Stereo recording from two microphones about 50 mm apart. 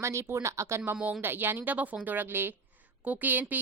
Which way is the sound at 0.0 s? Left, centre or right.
Right.